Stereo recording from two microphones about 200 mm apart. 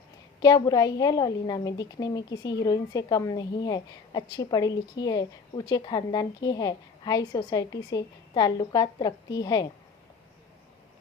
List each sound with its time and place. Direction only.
0.4 s a woman's voice: 20° left (ahead or behind)